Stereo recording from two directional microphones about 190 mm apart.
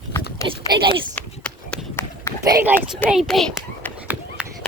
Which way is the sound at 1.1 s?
5° left (ahead or behind).